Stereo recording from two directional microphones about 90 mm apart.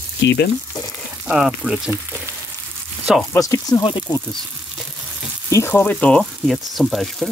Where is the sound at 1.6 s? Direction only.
10° right (ahead or behind).